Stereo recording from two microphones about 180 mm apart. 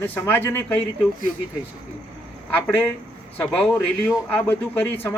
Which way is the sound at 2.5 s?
10° left (ahead or behind).